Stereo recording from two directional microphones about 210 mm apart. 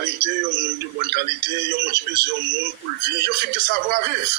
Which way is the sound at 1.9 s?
55° right (ahead or behind).